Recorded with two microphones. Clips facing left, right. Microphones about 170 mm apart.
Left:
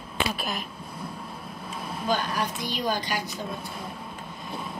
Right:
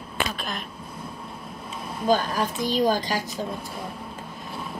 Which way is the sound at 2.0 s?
45° right (ahead or behind).